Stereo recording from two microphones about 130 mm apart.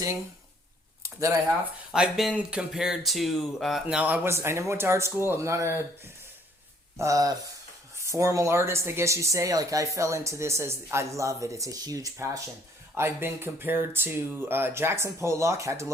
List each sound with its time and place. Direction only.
1.0 s a sound: 25° right (ahead or behind)
1.9 s speech: 5° right (ahead or behind); by 5.7 s 20° right (ahead or behind)
6.9 s speech: 25° right (ahead or behind)